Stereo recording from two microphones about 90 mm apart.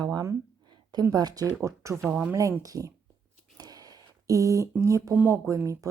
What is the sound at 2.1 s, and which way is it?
Speech, 15° right (ahead or behind).